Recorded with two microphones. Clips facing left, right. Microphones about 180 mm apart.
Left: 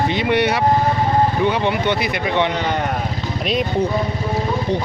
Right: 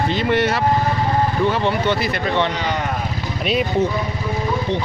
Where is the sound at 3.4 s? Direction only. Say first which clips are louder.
Right 1 dB; 5° right (ahead or behind).